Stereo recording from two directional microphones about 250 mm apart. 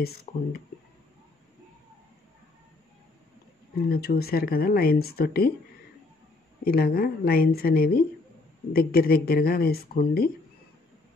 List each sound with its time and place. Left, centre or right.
0.0 s speech: left
3.7 s speech: left
6.6 s speech: left